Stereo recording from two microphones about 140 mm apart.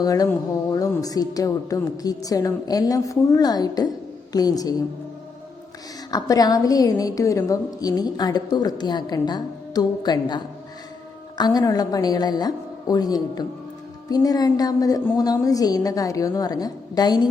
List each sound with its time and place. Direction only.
0.0 s a woman's voice: 25° left (ahead or behind)
6.1 s a woman's voice: 25° left (ahead or behind)